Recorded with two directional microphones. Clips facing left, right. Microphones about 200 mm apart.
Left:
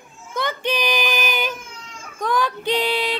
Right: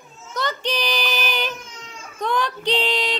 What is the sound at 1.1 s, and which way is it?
Female singing, 10° left (ahead or behind).